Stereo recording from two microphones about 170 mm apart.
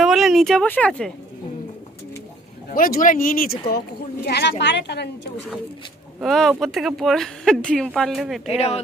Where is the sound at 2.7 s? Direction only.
55° left (ahead or behind); by 4.5 s 70° left (ahead or behind).